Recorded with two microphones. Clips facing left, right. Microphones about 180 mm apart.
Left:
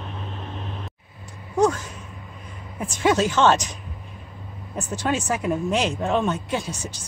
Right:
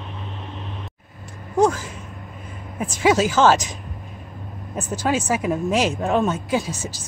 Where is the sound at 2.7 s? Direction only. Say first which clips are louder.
Right 2 dB; centre (ahead or behind).